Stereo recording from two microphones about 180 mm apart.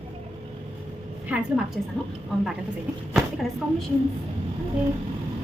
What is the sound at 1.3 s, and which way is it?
Speech, 5° right (ahead or behind).